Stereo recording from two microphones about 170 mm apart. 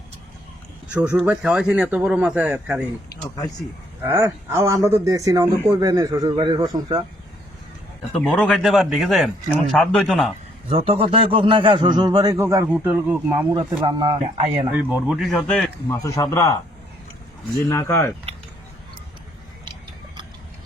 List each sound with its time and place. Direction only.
0.9 s speech: 10° right (ahead or behind)
4.0 s a man's voice: 15° right (ahead or behind)
8.1 s a man's voice: 5° left (ahead or behind)
10.7 s a man's voice: 35° right (ahead or behind); by 13.5 s 10° right (ahead or behind)
13.5 s a man's voice: 25° right (ahead or behind)
14.7 s a man's voice: 10° right (ahead or behind)
15.9 s a man's voice: 20° left (ahead or behind)
17.7 s speech: 15° left (ahead or behind)